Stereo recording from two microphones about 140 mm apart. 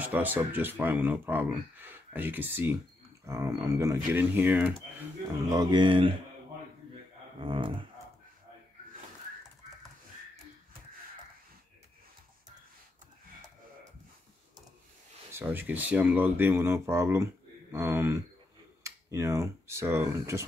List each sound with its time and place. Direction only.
0.0 s speech: 10° right (ahead or behind)
5.5 s speech: 30° right (ahead or behind)
7.3 s speech: 40° right (ahead or behind)
15.3 s speech: 15° right (ahead or behind)